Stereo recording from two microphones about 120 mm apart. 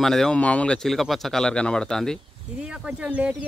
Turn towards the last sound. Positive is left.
turn(degrees=-10)  # may be behind; listen again after turning